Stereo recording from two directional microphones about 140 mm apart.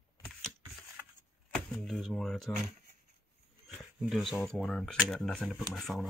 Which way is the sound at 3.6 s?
Centre (ahead or behind).